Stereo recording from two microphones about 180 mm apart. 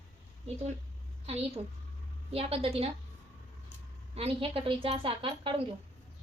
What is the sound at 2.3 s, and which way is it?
Speech, 30° right (ahead or behind).